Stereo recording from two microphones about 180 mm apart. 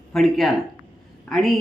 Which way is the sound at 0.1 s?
Centre (ahead or behind).